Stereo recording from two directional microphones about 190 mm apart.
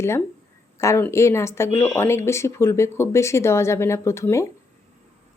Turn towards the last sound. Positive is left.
turn(degrees=15)  # may be behind; listen again after turning